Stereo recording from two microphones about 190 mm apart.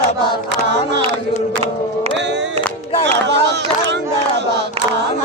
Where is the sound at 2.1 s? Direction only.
70° right (ahead or behind).